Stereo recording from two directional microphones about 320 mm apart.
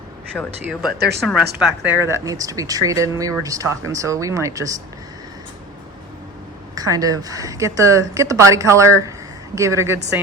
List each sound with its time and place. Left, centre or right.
0.6 s speech: centre
0.9 s speech: right
1.5 s speech: centre
6.7 s speech: centre